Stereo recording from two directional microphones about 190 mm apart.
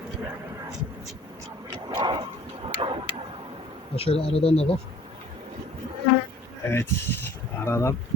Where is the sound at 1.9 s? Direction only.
25° right (ahead or behind).